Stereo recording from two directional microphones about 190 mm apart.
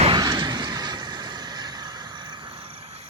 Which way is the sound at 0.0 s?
25° right (ahead or behind).